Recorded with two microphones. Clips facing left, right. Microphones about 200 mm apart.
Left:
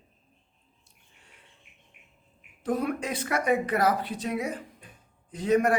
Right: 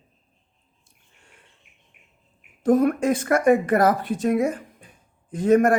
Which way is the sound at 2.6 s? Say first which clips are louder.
Right 10 dB; 50° right (ahead or behind).